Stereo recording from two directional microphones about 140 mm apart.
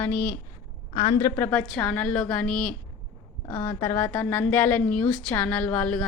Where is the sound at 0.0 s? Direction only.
15° left (ahead or behind).